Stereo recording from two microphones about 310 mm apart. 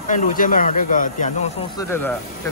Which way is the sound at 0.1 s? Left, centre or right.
Left.